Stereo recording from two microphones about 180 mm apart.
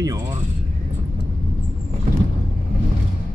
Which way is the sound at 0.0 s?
20° right (ahead or behind).